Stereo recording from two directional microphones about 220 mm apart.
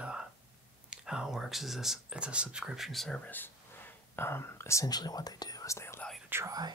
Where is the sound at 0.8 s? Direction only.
5° right (ahead or behind).